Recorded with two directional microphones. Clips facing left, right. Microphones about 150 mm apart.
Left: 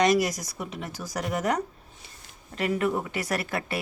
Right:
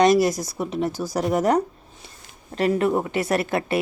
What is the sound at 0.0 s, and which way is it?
A woman's voice, 30° right (ahead or behind).